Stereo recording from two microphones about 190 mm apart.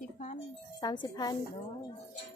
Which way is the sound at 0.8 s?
20° left (ahead or behind).